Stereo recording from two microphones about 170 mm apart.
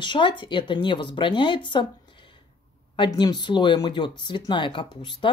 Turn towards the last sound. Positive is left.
turn(degrees=30)  # may be behind; listen again after turning